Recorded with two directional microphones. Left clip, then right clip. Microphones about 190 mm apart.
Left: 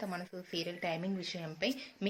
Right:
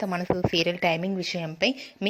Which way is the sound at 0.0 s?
40° right (ahead or behind).